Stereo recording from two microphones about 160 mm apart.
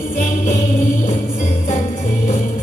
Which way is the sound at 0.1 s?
50° left (ahead or behind).